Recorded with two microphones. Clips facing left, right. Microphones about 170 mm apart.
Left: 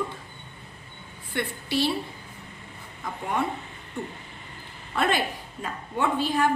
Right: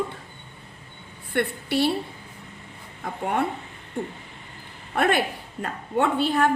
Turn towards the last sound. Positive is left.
turn(degrees=-65)  # may be behind; listen again after turning